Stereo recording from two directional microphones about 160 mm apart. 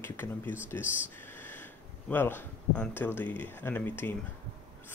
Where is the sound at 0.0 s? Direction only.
15° left (ahead or behind).